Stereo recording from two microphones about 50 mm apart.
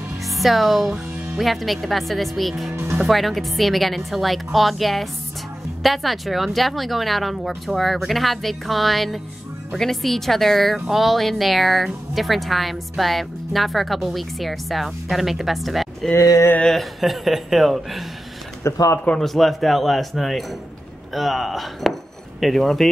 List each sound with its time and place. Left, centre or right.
0.4 s speech: centre
18.6 s speech: left
19.1 s speech: centre